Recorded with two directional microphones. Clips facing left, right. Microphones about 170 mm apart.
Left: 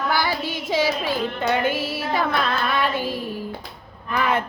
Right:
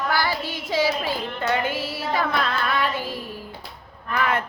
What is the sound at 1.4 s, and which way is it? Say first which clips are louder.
Music: left 2 dB; 20° left (ahead or behind).